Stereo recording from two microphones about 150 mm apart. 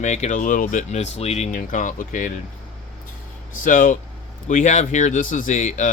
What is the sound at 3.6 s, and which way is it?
Speech, 60° left (ahead or behind).